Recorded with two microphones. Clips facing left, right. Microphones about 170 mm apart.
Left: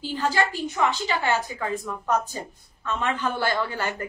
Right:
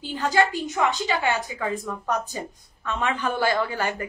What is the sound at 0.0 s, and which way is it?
A woman's voice, 15° right (ahead or behind).